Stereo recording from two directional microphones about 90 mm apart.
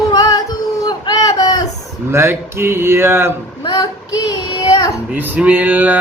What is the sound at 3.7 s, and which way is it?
Child singing, 45° left (ahead or behind).